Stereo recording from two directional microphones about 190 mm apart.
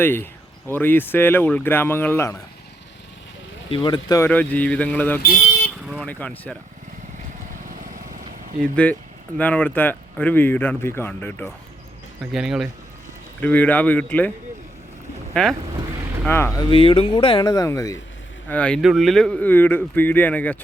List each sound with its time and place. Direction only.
0.0 s speech: 10° left (ahead or behind)
3.7 s speech: 30° left (ahead or behind)
4.2 s speech: 10° left (ahead or behind)
7.7 s lawn mower: 45° right (ahead or behind)
8.7 s speech: 10° left (ahead or behind)
12.2 s speech: centre (ahead or behind)
13.4 s speech: 10° left (ahead or behind)